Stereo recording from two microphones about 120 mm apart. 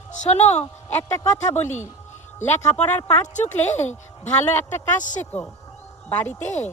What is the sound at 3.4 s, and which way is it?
Speech, 15° left (ahead or behind).